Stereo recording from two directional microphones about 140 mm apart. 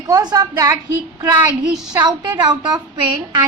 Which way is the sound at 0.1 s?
25° right (ahead or behind).